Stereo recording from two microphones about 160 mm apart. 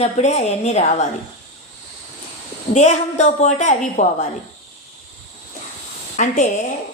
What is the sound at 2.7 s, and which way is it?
A woman's voice, 45° left (ahead or behind).